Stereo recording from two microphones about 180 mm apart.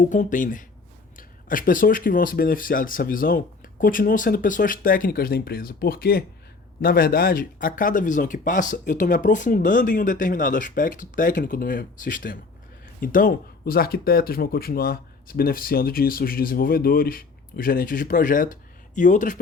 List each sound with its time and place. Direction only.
0.0 s speech: 45° left (ahead or behind)